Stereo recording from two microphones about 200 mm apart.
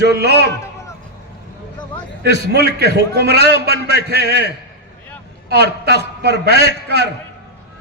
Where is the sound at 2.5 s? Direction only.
55° right (ahead or behind).